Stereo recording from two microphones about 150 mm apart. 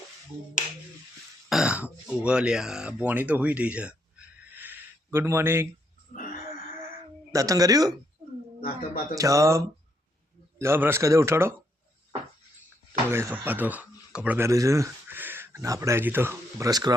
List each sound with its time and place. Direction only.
1.5 s speech: 5° right (ahead or behind)
7.3 s speech: 25° right (ahead or behind)
9.1 s speech: 20° right (ahead or behind)
12.9 s speech: 15° right (ahead or behind)